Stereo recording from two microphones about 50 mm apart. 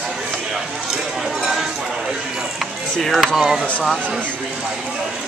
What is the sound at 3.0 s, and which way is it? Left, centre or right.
Speech, centre.